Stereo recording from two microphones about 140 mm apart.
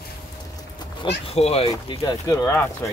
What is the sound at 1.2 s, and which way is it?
Speech, 45° left (ahead or behind).